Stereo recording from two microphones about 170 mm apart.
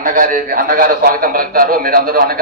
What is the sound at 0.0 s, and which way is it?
A man's voice, 55° right (ahead or behind).